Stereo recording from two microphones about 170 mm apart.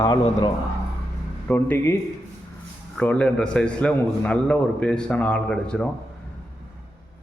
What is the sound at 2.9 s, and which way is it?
A man's voice, 5° left (ahead or behind).